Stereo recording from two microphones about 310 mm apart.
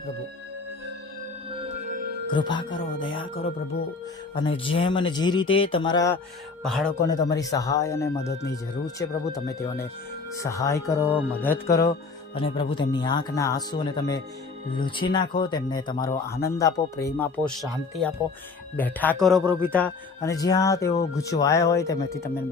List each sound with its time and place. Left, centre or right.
1.5 s music: centre
2.3 s speech: centre
4.4 s speech: centre
6.6 s speech: centre
7.1 s speech: centre
8.3 s speech: left
9.0 s speech: centre